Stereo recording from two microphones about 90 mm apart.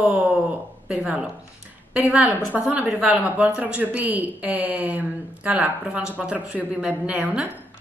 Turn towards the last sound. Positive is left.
turn(degrees=-15)  # may be behind; listen again after turning